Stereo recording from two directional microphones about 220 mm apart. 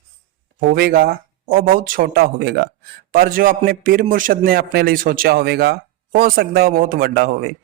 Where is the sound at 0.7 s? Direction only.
40° right (ahead or behind).